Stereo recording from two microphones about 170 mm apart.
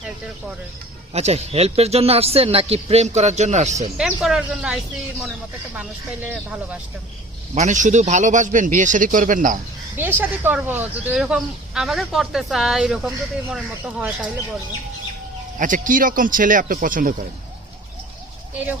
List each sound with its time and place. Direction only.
1.1 s speech: 40° right (ahead or behind)
3.9 s speech: 5° right (ahead or behind)
6.2 s speech: 10° right (ahead or behind)
7.5 s speech: 45° right (ahead or behind)
9.9 s speech: 10° right (ahead or behind)
15.5 s speech: 50° right (ahead or behind)